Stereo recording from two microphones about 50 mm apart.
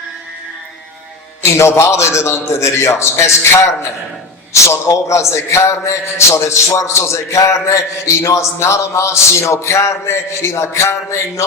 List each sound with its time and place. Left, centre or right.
1.5 s a man's voice: left